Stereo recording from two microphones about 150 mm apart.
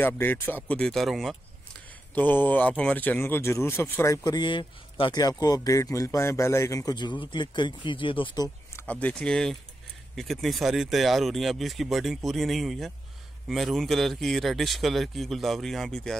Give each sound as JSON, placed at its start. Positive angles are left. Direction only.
{"t": 0.0, "sound": "speech", "side_deg": 15}
{"t": 2.1, "sound": "speech", "side_deg": 10}
{"t": 4.2, "sound": "speech", "side_deg": 30}
{"t": 9.0, "sound": "speech", "side_deg": 5}